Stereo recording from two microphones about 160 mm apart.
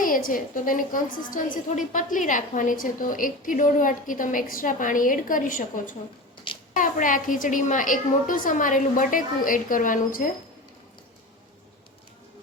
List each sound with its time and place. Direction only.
0.0 s a woman's voice: 60° left (ahead or behind)